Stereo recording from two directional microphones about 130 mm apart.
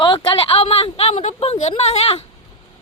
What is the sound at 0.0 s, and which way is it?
A woman's voice, 40° left (ahead or behind).